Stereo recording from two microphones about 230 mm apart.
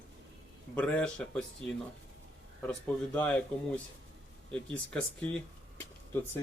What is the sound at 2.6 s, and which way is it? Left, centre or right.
Speech, centre.